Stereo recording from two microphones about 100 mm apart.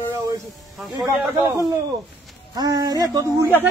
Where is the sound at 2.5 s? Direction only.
35° right (ahead or behind).